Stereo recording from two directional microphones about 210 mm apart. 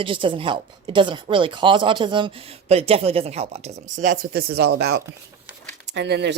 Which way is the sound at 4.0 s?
40° right (ahead or behind).